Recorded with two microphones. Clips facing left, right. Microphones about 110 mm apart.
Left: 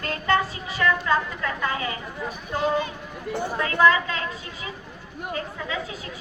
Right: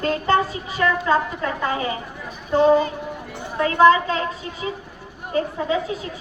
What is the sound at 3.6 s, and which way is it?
A woman's voice, 25° right (ahead or behind).